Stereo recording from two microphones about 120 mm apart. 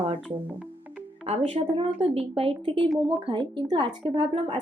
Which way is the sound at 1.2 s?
60° right (ahead or behind).